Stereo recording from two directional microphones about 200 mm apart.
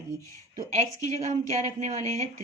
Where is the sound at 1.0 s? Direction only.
35° right (ahead or behind).